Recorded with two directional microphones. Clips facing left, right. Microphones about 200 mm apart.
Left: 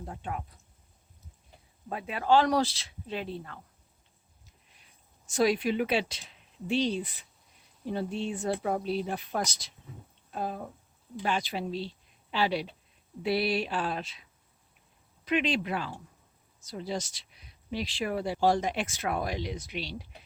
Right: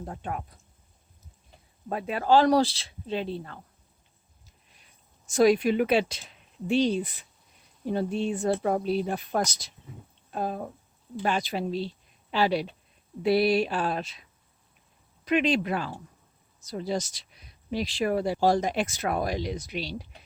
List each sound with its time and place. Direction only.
0.0 s speech: 50° right (ahead or behind)
1.9 s speech: 40° right (ahead or behind)
5.2 s speech: 45° right (ahead or behind)
15.2 s speech: 45° right (ahead or behind)